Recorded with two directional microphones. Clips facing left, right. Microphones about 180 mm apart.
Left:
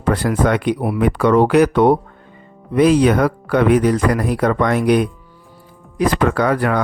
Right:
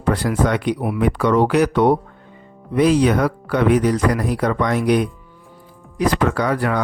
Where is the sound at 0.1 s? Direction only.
55° left (ahead or behind).